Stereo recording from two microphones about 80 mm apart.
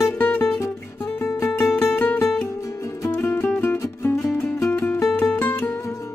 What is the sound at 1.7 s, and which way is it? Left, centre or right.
Music, centre.